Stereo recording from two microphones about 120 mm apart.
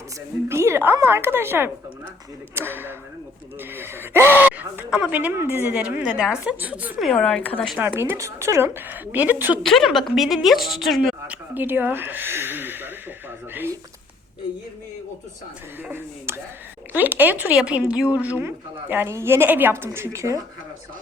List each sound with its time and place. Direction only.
0.4 s a woman's voice: 20° right (ahead or behind)
7.0 s speech: 5° left (ahead or behind)
7.8 s a woman's voice: 20° right (ahead or behind)
9.6 s a woman's voice: centre (ahead or behind)
11.5 s a woman's voice: 15° right (ahead or behind)
15.8 s a woman's voice: 20° right (ahead or behind)